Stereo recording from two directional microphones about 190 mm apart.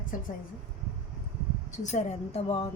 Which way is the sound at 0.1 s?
45° left (ahead or behind).